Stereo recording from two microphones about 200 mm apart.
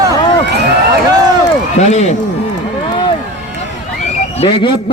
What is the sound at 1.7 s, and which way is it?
Speech, 35° left (ahead or behind).